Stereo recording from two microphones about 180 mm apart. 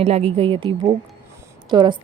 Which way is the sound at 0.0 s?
35° right (ahead or behind).